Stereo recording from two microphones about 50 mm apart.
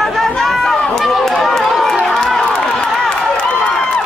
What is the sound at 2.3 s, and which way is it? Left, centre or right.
Crowd, centre.